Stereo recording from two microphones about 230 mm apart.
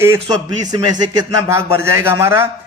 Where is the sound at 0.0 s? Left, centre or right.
Centre.